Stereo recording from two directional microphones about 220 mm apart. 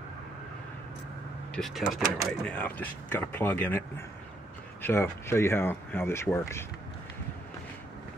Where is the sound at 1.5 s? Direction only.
Centre (ahead or behind).